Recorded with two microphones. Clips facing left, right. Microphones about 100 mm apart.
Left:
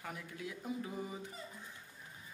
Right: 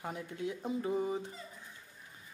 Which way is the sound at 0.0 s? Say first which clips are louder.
Right 6 dB; 25° right (ahead or behind).